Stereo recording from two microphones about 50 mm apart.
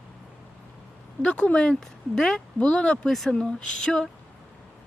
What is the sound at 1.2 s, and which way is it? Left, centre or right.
Speech, left.